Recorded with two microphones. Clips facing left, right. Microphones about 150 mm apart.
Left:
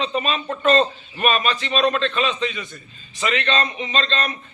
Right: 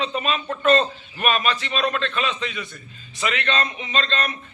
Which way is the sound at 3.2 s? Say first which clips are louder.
Left 2 dB; 10° right (ahead or behind).